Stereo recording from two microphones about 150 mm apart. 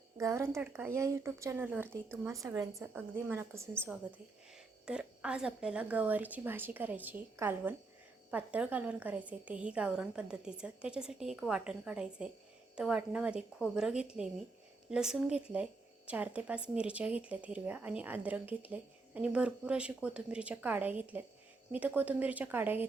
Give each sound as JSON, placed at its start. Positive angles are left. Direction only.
{"t": 0.2, "sound": "speech", "side_deg": -20}
{"t": 4.9, "sound": "speech", "side_deg": -5}